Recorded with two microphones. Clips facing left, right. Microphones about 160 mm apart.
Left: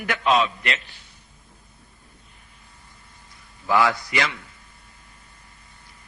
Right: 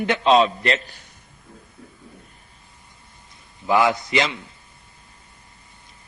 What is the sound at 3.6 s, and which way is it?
Speech, 20° right (ahead or behind).